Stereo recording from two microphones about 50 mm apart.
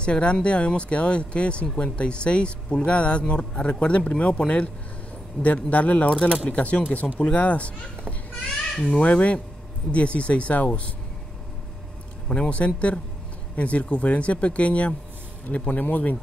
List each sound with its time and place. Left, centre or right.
0.0 s speech: left
7.0 s speech: centre
7.3 s speech: left
12.3 s speech: left